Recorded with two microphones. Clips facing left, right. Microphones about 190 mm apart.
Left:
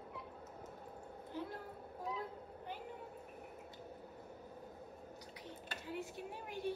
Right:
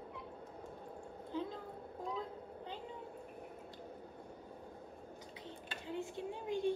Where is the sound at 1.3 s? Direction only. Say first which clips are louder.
Right 4 dB; 20° right (ahead or behind).